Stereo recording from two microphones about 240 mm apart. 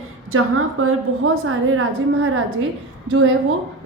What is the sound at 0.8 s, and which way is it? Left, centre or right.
A woman's voice, right.